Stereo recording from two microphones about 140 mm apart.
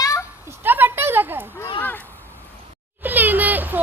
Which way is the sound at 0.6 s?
15° right (ahead or behind).